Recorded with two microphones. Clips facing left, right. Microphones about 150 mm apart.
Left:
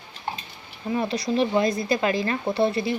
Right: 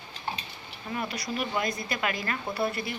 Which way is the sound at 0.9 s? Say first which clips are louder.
Left 9 dB; 30° left (ahead or behind).